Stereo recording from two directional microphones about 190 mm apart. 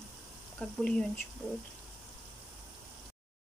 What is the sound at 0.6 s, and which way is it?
Speech, 5° left (ahead or behind).